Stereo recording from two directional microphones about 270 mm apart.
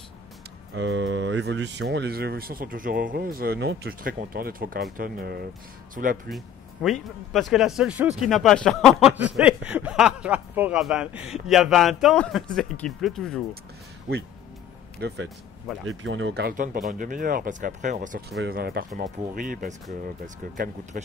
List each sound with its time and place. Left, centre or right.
0.7 s speech: right
6.3 s speech: centre
15.0 s speech: right